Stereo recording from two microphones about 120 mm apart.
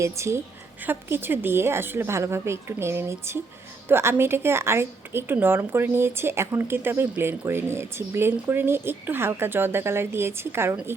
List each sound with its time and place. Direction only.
0.0 s a woman's voice: 25° right (ahead or behind)